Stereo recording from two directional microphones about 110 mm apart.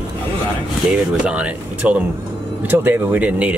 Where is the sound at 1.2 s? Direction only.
10° right (ahead or behind).